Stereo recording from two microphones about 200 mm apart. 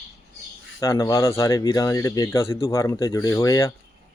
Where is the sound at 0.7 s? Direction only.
15° left (ahead or behind).